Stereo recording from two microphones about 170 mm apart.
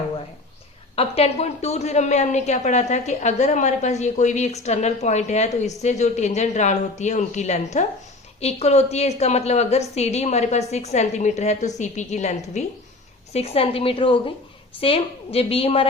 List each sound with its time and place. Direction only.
0.9 s a woman's voice: 35° left (ahead or behind)